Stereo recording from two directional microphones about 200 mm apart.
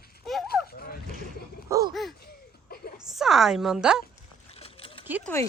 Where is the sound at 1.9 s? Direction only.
Centre (ahead or behind).